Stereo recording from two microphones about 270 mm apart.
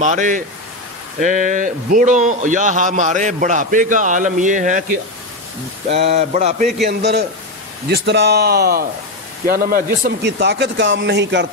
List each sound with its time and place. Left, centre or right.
0.0 s speech: right
5.9 s speech: right
6.8 s speech: right